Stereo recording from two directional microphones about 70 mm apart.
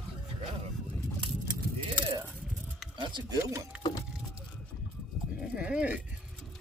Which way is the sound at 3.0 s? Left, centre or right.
Right.